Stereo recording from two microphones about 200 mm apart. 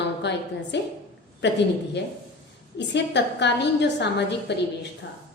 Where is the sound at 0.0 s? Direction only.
60° left (ahead or behind).